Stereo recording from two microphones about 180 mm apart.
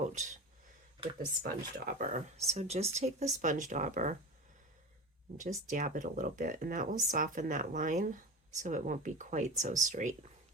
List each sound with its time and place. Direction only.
0.0 s a sound: 40° right (ahead or behind)
1.4 s speech: 55° right (ahead or behind)
5.4 s speech: 45° right (ahead or behind)